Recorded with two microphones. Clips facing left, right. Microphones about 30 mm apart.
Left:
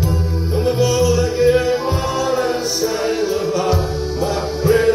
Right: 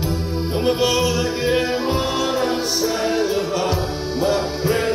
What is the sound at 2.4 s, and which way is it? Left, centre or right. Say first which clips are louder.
Music: left 1 dB; right.